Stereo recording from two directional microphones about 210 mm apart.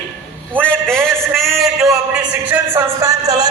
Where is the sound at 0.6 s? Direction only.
5° left (ahead or behind).